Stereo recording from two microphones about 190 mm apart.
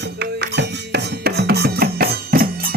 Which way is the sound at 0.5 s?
60° right (ahead or behind).